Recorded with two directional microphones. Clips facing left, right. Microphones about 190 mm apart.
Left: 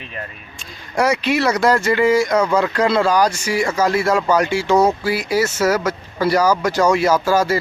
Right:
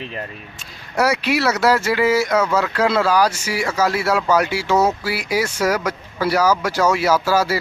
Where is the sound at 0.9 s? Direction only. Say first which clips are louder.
Left 1 dB; 10° right (ahead or behind).